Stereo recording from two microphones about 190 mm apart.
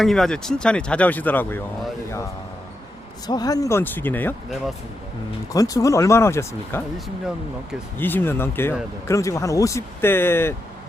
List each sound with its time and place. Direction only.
0.0 s speech: centre (ahead or behind)
3.2 s speech: 20° left (ahead or behind)
5.5 s speech: 20° left (ahead or behind)
7.9 s speech: 10° left (ahead or behind)